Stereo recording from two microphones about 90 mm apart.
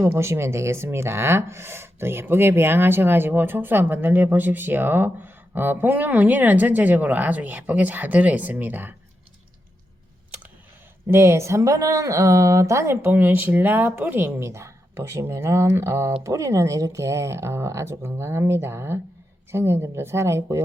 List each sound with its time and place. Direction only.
0.0 s speech: 30° right (ahead or behind)
11.1 s speech: 30° right (ahead or behind)